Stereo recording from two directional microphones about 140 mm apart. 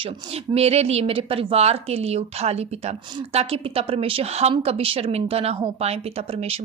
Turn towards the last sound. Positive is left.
turn(degrees=-45)  # may be behind; listen again after turning